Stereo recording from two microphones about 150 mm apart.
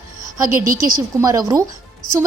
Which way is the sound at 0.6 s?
65° right (ahead or behind).